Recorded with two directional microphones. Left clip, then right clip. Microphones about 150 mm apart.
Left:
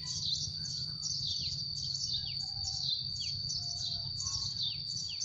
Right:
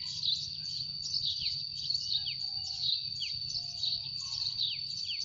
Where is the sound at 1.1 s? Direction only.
15° left (ahead or behind).